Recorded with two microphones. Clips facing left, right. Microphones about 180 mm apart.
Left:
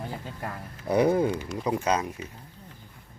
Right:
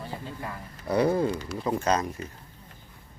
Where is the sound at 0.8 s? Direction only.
15° left (ahead or behind).